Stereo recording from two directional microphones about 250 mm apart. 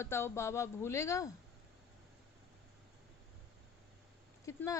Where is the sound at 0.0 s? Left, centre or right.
Centre.